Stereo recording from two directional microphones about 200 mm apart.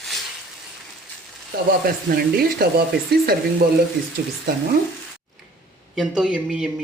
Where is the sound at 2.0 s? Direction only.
50° right (ahead or behind).